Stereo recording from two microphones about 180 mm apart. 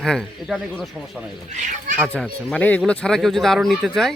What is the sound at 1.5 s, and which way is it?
Speech, 45° right (ahead or behind).